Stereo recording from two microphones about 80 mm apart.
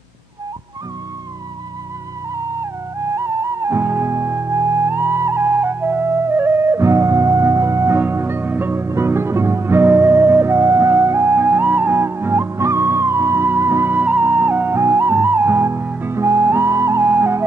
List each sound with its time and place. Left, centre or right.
3.2 s music: right
11.4 s music: right